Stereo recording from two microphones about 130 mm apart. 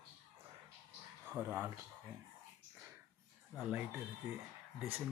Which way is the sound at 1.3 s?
15° right (ahead or behind).